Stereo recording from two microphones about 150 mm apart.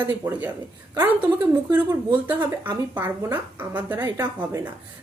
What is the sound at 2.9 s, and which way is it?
A woman's voice, 10° right (ahead or behind).